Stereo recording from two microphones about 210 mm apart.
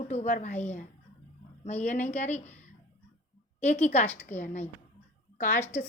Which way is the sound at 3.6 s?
35° left (ahead or behind).